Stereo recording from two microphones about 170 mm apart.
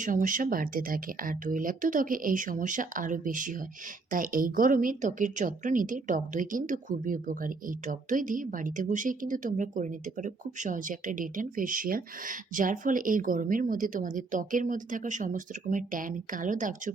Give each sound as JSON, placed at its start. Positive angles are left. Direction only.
{"t": 0.0, "sound": "speech", "side_deg": -50}